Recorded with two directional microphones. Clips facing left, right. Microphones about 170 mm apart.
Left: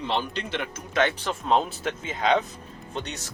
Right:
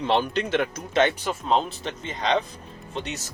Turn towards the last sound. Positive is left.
turn(degrees=0)  # may be behind; listen again after turning